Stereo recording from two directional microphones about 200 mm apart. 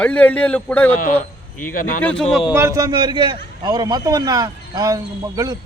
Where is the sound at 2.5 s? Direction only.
15° right (ahead or behind).